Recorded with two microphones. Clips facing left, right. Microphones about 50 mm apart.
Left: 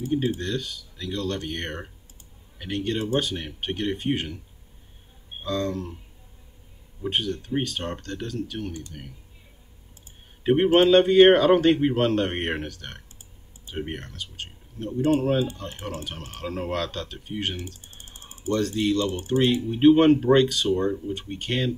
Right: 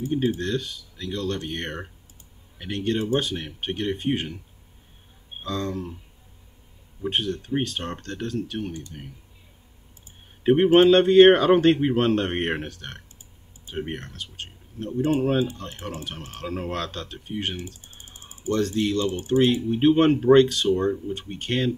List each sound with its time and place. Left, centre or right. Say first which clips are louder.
0.1 s speech: right 1 dB; centre
5.4 s speech: left 2 dB; centre
7.0 s speech: right 1 dB; centre
8.0 s speech: right 2 dB; right
10.4 s speech: right 2 dB; centre
13.7 s speech: right 1 dB; centre
14.1 s speech: even; centre
16.3 s speech: left 1 dB; centre
18.7 s speech: left 1 dB; centre
19.2 s speech: right 3 dB; centre